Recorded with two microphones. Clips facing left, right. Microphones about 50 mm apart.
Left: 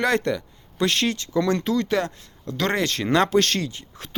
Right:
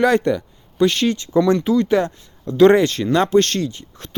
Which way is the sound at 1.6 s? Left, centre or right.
Centre.